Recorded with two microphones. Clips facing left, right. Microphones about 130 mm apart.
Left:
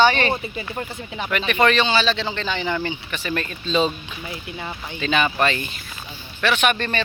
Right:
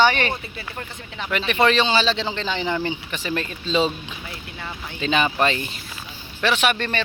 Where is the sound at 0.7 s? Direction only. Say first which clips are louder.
Left 4 dB; 10° left (ahead or behind).